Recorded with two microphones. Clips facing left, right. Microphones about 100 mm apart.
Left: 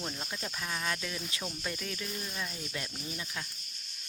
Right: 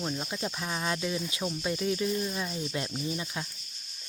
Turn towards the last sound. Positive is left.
turn(degrees=-25)  # may be behind; listen again after turning